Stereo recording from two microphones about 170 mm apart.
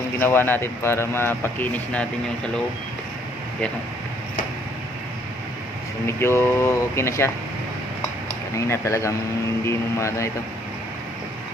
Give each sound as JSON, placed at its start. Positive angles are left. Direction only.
{"t": 0.2, "sound": "speech", "side_deg": 10}
{"t": 6.1, "sound": "speech", "side_deg": 15}
{"t": 8.5, "sound": "speech", "side_deg": 15}